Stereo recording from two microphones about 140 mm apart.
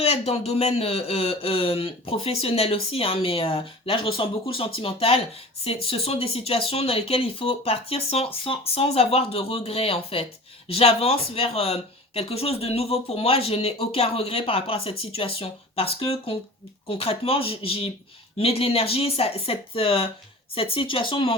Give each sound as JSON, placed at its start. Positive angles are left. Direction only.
{"t": 0.0, "sound": "speech", "side_deg": 45}